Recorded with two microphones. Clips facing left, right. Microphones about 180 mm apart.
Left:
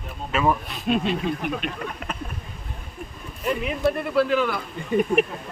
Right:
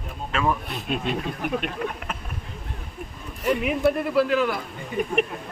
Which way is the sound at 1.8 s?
5° right (ahead or behind).